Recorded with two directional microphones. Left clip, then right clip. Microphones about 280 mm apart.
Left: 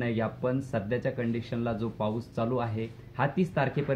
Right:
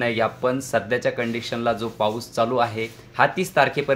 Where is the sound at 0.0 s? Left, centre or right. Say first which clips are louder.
Right 9 dB; centre.